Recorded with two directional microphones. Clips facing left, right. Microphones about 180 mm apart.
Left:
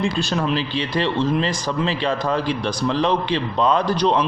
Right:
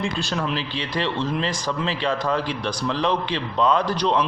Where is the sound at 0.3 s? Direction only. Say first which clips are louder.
Left 4 dB; 25° left (ahead or behind).